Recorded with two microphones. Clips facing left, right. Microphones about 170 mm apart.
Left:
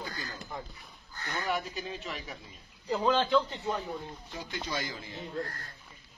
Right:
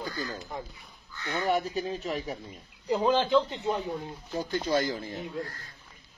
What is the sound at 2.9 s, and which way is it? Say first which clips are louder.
Speech: right 3 dB; 10° right (ahead or behind).